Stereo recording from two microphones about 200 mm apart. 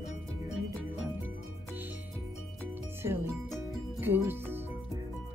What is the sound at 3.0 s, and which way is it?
Music, 10° right (ahead or behind).